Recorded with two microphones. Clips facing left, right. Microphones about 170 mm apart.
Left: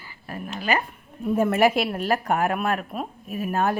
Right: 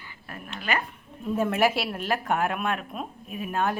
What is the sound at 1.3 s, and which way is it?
A woman's voice, 10° left (ahead or behind).